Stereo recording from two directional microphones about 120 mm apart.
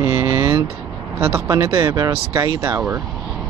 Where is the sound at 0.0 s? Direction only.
25° right (ahead or behind).